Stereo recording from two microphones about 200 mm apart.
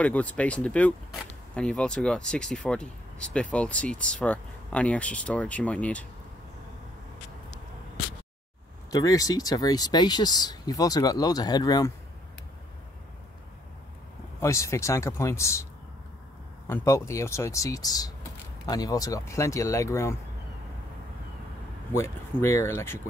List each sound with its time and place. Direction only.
0.0 s speech: 5° left (ahead or behind)
8.9 s speech: 15° left (ahead or behind)
14.4 s speech: 15° left (ahead or behind)
16.6 s speech: 10° left (ahead or behind)
21.9 s speech: 15° left (ahead or behind)